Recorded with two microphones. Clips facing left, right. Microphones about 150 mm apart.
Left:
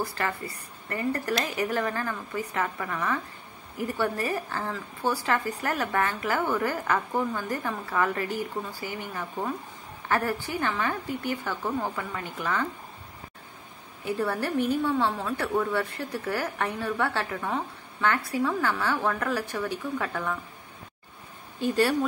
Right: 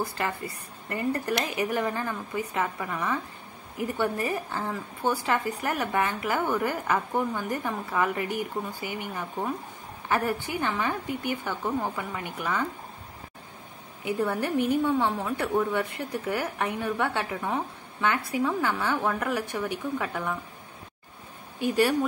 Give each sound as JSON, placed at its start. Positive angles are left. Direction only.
{"t": 0.0, "sound": "a woman's voice", "side_deg": -20}
{"t": 14.0, "sound": "a woman's voice", "side_deg": -15}
{"t": 21.5, "sound": "a woman's voice", "side_deg": -15}